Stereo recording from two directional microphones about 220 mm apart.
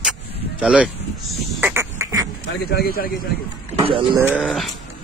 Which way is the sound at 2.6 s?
45° left (ahead or behind).